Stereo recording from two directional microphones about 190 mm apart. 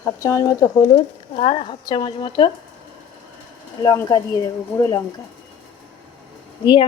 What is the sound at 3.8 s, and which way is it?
Speech, 20° left (ahead or behind).